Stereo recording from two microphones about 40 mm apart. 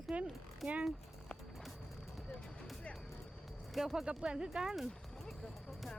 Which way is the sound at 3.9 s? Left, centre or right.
Right.